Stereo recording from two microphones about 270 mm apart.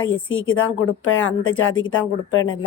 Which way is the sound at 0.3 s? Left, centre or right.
Left.